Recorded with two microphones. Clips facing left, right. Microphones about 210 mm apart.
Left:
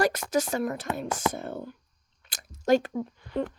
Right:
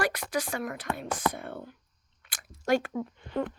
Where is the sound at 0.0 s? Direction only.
45° left (ahead or behind).